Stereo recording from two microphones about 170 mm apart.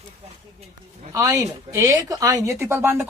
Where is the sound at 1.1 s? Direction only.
20° right (ahead or behind).